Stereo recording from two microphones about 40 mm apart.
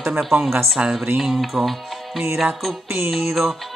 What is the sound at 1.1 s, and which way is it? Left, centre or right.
Music, centre.